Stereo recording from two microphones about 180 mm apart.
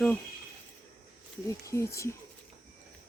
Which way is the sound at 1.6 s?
15° left (ahead or behind).